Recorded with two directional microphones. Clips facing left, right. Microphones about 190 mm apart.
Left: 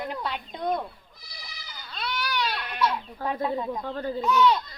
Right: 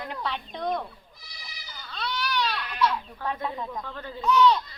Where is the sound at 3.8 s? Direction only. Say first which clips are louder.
Left 8 dB; 35° left (ahead or behind).